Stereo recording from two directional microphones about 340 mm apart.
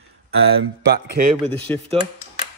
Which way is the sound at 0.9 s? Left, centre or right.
Right.